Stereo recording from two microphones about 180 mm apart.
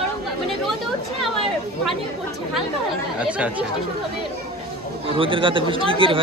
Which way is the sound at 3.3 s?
5° right (ahead or behind).